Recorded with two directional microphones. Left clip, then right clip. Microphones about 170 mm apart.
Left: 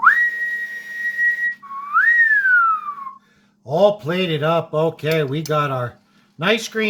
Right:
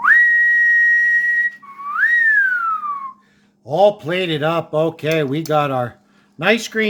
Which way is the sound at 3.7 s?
10° right (ahead or behind).